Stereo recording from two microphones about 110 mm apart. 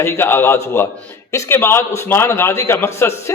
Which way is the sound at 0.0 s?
20° left (ahead or behind).